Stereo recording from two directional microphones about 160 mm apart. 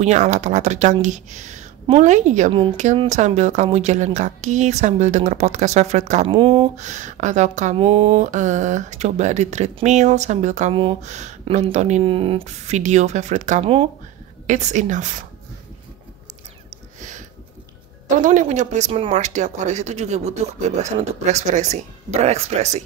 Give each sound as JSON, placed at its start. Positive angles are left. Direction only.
{"t": 0.0, "sound": "speech", "side_deg": -45}
{"t": 6.2, "sound": "speech", "side_deg": -35}
{"t": 7.7, "sound": "speech", "side_deg": -35}
{"t": 18.2, "sound": "speech", "side_deg": -50}